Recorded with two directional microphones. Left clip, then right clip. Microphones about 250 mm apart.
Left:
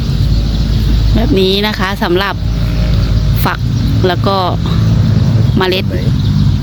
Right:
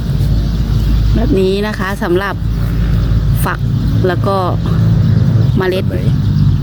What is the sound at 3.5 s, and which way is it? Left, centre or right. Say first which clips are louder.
Speech: left 3 dB; centre.